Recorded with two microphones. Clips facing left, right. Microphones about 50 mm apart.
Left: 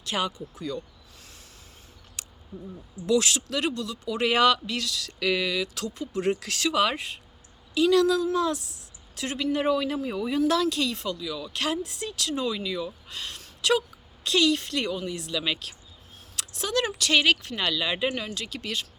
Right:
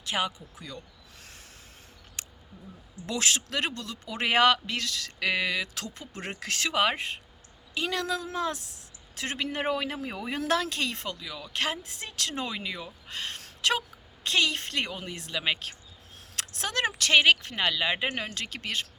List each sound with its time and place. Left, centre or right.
0.0 s speech: centre
2.2 s a sound: right
3.1 s speech: right
10.3 s speech: right
11.2 s speech: right
16.3 s speech: right
18.1 s speech: right